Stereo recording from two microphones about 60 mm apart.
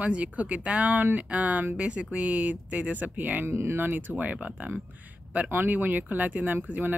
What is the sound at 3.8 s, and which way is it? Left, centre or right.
Speech, right.